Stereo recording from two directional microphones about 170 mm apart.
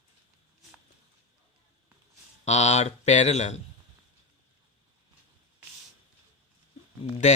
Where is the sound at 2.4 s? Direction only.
40° left (ahead or behind).